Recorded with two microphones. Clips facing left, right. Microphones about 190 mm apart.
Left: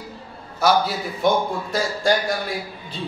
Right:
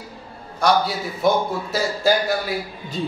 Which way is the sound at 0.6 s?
Centre (ahead or behind).